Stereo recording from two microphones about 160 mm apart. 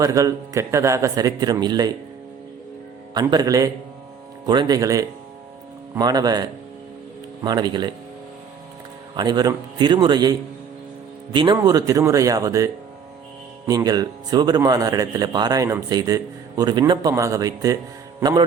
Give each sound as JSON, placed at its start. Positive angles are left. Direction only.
{"t": 0.0, "sound": "speech", "side_deg": -20}
{"t": 3.2, "sound": "speech", "side_deg": -25}
{"t": 7.4, "sound": "speech", "side_deg": -25}
{"t": 9.1, "sound": "speech", "side_deg": -25}
{"t": 11.3, "sound": "a man's voice", "side_deg": -25}